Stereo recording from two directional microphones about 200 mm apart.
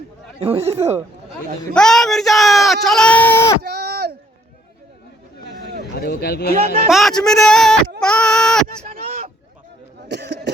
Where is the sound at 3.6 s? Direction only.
50° right (ahead or behind).